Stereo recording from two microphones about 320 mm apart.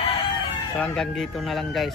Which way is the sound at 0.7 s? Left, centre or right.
Centre.